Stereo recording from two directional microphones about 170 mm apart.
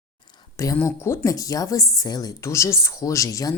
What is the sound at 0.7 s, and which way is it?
Speech, 15° left (ahead or behind).